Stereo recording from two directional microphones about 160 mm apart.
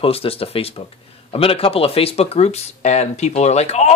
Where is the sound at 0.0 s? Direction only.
35° left (ahead or behind).